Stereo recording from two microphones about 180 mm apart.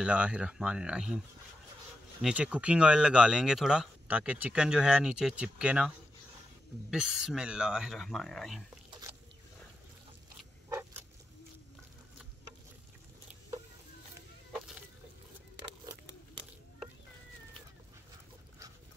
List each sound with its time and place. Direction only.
0.0 s speech: 5° right (ahead or behind)
2.2 s speech: 5° right (ahead or behind)
10.7 s vehicle: 15° right (ahead or behind)